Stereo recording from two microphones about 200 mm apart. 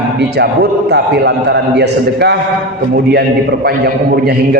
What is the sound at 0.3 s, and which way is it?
A man's voice, 55° right (ahead or behind).